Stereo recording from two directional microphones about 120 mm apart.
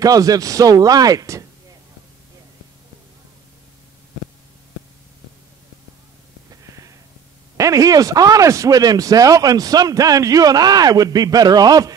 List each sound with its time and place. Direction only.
0.0 s speech: 30° right (ahead or behind)
6.5 s a sound: 30° right (ahead or behind)
7.5 s speech: 25° right (ahead or behind)